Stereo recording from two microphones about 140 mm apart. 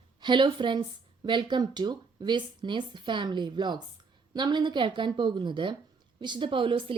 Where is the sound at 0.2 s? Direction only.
35° right (ahead or behind).